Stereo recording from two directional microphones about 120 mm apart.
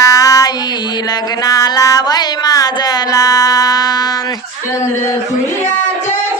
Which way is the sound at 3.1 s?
30° left (ahead or behind).